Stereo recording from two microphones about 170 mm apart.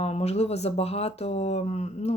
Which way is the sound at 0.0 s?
40° left (ahead or behind).